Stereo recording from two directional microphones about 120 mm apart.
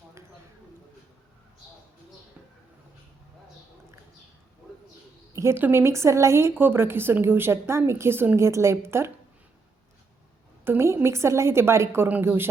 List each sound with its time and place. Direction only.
5.3 s a woman's voice: 25° right (ahead or behind)
10.6 s a woman's voice: 20° right (ahead or behind)